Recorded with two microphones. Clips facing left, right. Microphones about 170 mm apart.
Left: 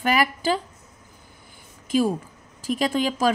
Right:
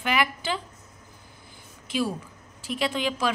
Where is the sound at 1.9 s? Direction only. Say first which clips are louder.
Left 6 dB; 45° left (ahead or behind).